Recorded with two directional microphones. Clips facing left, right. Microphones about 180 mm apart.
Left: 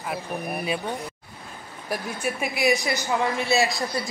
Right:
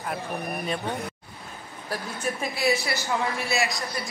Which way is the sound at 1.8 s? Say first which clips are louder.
Left 2 dB; 10° left (ahead or behind).